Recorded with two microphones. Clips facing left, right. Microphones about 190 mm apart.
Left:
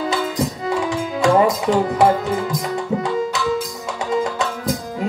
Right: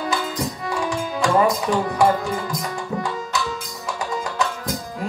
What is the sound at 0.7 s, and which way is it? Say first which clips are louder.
Tabla: left 3 dB; 20° left (ahead or behind).